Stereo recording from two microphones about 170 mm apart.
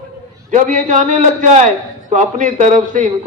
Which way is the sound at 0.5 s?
45° right (ahead or behind).